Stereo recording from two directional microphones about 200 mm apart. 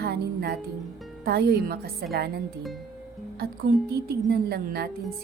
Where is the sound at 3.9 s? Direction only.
55° right (ahead or behind).